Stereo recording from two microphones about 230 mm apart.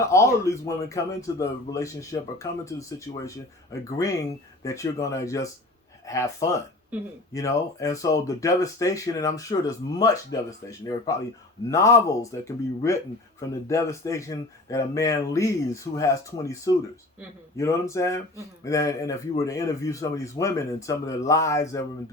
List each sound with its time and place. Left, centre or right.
0.0 s speech: centre